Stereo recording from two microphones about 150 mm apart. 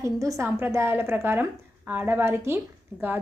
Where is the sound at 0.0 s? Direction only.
20° right (ahead or behind).